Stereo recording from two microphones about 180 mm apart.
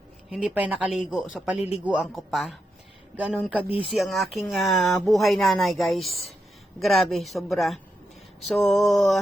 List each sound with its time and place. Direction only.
0.3 s speech: 5° right (ahead or behind)
3.7 s speech: 30° left (ahead or behind)
3.9 s speech: centre (ahead or behind)